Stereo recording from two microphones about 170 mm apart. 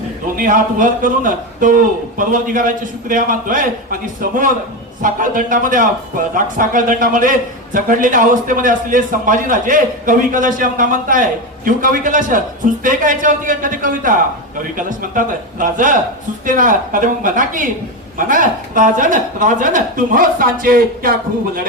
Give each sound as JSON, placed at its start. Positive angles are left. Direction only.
{"t": 0.3, "sound": "a man's voice", "side_deg": -50}